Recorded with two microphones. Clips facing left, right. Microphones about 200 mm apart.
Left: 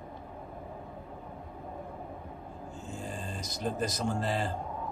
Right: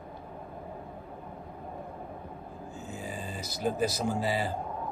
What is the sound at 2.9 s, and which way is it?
Speech, 5° right (ahead or behind).